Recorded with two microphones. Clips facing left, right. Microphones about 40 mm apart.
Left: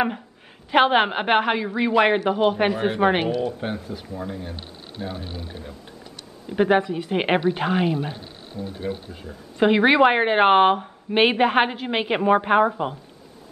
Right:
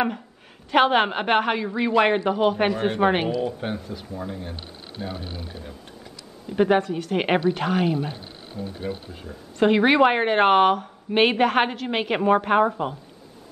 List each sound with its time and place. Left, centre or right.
0.7 s a woman's voice: centre
5.0 s speech: left
6.5 s a woman's voice: centre
8.8 s speech: centre
9.6 s a woman's voice: centre